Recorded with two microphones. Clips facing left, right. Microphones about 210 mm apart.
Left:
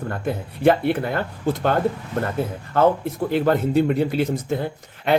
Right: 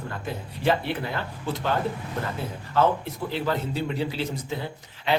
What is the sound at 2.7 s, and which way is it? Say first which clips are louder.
Speech: left 5 dB; 55° left (ahead or behind).